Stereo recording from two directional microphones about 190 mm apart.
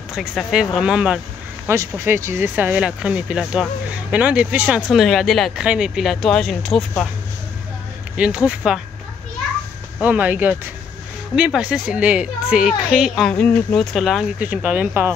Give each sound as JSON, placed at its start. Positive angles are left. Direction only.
{"t": 0.1, "sound": "a woman's voice", "side_deg": -5}
{"t": 8.2, "sound": "a woman's voice", "side_deg": -5}
{"t": 9.9, "sound": "a woman's voice", "side_deg": -10}